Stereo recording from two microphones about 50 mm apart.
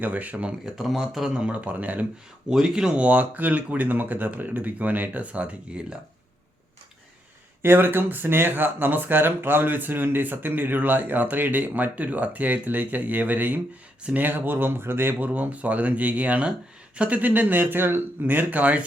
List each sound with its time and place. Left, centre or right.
0.0 s speech: right
0.6 s speech: centre; by 2.0 s right
2.5 s speech: centre
3.0 s speech: right
7.6 s speech: right
15.3 s speech: right